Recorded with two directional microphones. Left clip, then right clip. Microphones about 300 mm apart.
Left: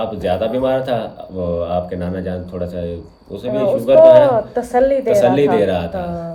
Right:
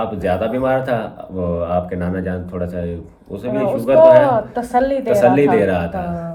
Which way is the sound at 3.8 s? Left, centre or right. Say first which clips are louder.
Left 1 dB; centre.